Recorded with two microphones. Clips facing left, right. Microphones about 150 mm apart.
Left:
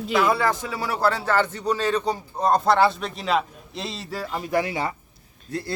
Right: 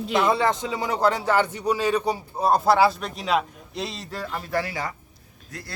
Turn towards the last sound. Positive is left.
turn(degrees=30)  # may be behind; listen again after turning